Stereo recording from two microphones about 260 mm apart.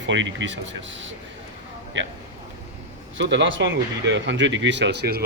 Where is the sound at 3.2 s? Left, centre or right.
Right.